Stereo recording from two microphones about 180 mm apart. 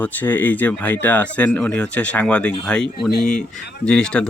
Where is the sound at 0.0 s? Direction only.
10° left (ahead or behind).